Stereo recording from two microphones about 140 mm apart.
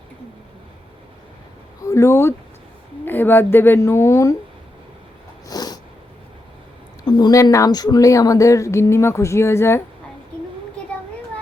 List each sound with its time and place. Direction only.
1.8 s a woman's voice: 20° left (ahead or behind)
5.5 s a sound: 30° left (ahead or behind)
7.0 s speech: 30° left (ahead or behind)